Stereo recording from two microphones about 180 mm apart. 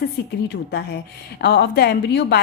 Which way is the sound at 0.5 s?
65° left (ahead or behind).